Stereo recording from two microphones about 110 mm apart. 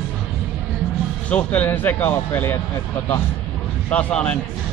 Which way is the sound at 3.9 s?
10° left (ahead or behind).